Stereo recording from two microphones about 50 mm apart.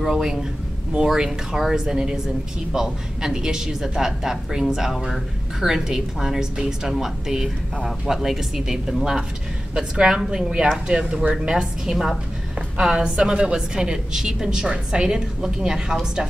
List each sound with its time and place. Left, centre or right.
0.0 s a woman's voice: centre
12.7 s a woman's voice: centre